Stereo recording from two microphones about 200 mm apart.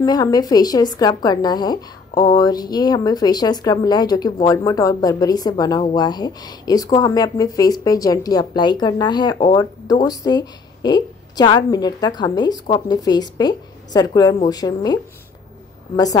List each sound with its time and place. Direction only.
0.0 s a woman's voice: 20° left (ahead or behind)